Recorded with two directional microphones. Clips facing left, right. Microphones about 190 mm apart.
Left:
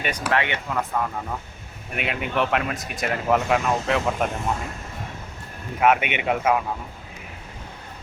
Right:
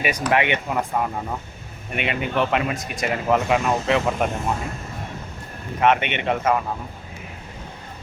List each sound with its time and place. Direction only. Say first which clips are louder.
0.3 s speech: right 3 dB; 15° right (ahead or behind)
1.9 s speech: right 2 dB; centre (ahead or behind)
5.8 s speech: even; 5° left (ahead or behind)